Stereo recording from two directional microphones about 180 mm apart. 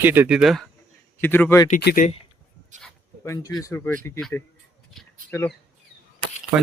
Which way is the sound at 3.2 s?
15° left (ahead or behind).